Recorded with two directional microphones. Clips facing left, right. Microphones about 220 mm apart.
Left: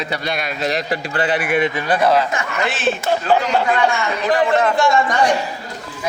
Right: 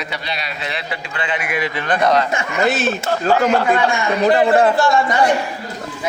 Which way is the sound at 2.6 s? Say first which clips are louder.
Right 3 dB; 40° right (ahead or behind).